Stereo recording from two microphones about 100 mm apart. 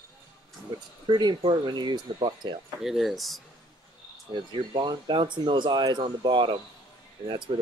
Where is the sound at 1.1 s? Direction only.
50° right (ahead or behind).